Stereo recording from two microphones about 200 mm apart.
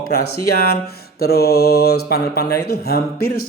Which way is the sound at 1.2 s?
50° left (ahead or behind).